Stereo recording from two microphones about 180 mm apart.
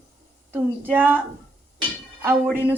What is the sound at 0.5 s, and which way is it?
Speech, 10° right (ahead or behind).